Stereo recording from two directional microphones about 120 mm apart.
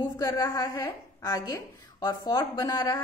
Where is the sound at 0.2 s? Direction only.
30° left (ahead or behind).